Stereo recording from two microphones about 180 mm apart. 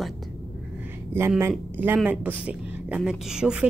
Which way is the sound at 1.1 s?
15° right (ahead or behind).